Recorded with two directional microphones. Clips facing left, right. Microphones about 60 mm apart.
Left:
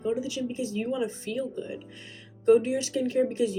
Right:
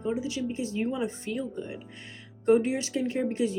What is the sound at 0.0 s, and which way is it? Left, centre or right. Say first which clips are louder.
Speech: left 1 dB; right.